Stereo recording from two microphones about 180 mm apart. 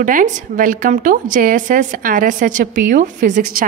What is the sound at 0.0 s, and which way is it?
A woman's voice, 45° right (ahead or behind).